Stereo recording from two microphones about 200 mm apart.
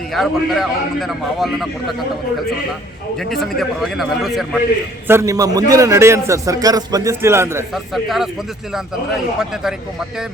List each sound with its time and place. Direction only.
0.1 s a man's voice: centre (ahead or behind)
3.2 s a man's voice: centre (ahead or behind)
5.0 s a man's voice: 15° right (ahead or behind)
7.7 s a man's voice: centre (ahead or behind)